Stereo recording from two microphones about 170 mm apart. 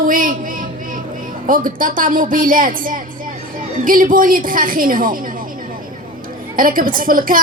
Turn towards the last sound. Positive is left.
turn(degrees=-55)  # may be behind; listen again after turning